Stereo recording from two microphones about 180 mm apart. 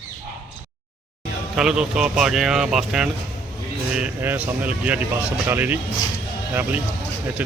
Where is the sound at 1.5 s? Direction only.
5° right (ahead or behind).